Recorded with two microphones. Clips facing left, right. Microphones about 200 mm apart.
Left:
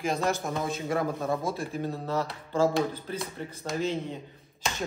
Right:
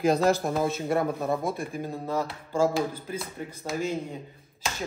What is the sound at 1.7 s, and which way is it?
Speech, 10° right (ahead or behind).